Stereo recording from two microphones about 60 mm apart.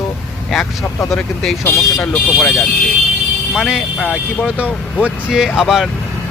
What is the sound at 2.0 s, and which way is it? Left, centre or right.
Speech, left.